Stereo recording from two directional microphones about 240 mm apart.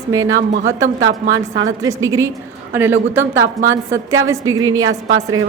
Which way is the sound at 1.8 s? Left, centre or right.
Centre.